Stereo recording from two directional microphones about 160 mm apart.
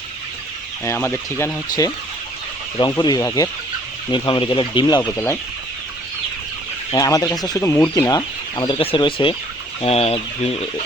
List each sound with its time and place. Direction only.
0.9 s speech: 15° left (ahead or behind)
4.1 s speech: 30° left (ahead or behind)
6.9 s speech: 20° left (ahead or behind); by 10.6 s 40° left (ahead or behind)